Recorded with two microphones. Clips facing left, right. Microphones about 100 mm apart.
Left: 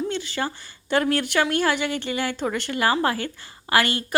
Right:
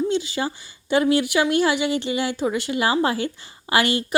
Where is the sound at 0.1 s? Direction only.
15° right (ahead or behind).